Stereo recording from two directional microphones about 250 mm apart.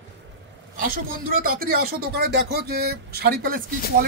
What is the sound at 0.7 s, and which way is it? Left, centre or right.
Speech, right.